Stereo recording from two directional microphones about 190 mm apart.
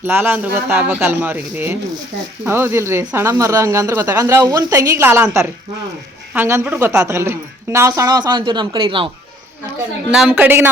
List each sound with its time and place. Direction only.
0.0 s speech: 10° right (ahead or behind)
10.1 s speech: 5° right (ahead or behind)